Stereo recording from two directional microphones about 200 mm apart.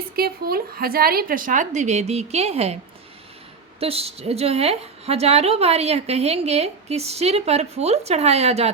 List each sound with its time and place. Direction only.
0.2 s a woman's voice: 50° right (ahead or behind); by 2.7 s 30° right (ahead or behind)
3.8 s a woman's voice: 30° right (ahead or behind)